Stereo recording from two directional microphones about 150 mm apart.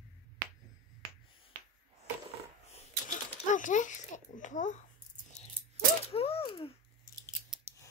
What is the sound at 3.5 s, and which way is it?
Babbling, 55° left (ahead or behind).